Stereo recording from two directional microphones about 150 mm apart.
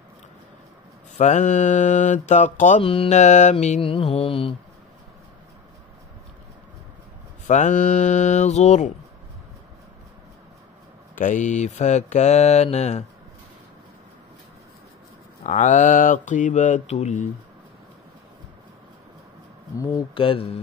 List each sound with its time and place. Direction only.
1.1 s mantra: 50° left (ahead or behind)
2.8 s mantra: 40° left (ahead or behind)
7.4 s mantra: 50° left (ahead or behind)
11.1 s mantra: 60° left (ahead or behind)
15.4 s mantra: 55° left (ahead or behind)
20.2 s mantra: 40° left (ahead or behind)